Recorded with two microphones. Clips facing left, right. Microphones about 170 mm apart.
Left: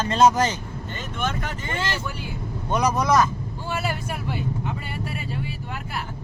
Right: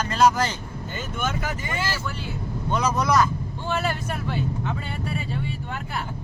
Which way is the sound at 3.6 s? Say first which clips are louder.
Right 2 dB; 5° left (ahead or behind).